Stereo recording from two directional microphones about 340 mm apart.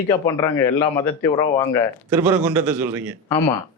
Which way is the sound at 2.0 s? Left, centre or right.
Centre.